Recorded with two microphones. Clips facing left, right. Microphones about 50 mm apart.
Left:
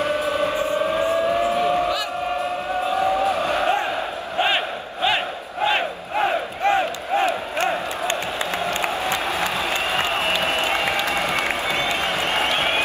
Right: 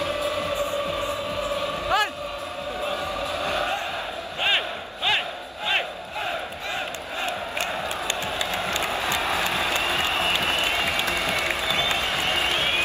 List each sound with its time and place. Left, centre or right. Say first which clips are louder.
0.0 s music: left 5 dB; left
2.9 s a sound: left 11 dB; left
4.5 s battle cry: left 2 dB; centre
6.1 s crowd: left 9 dB; left